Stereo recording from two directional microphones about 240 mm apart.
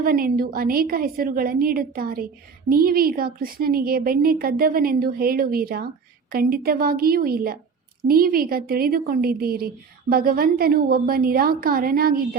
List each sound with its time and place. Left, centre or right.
0.0 s a woman's voice: right